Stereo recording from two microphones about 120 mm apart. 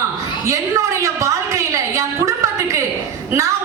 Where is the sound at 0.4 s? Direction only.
25° right (ahead or behind).